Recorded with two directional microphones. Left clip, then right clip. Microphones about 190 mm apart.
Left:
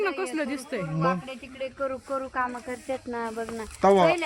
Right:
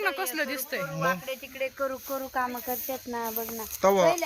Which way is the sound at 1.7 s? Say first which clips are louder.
Left 1 dB; 45° right (ahead or behind).